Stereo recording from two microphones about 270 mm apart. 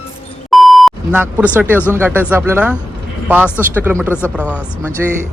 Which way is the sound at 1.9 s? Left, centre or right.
Centre.